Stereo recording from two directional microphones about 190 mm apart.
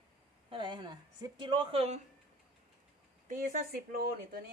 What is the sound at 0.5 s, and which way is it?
A woman's voice, 25° right (ahead or behind).